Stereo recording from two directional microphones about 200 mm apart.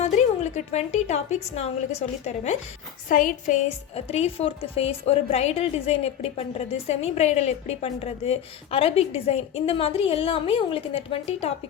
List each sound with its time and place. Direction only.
0.0 s a woman's voice: 35° left (ahead or behind)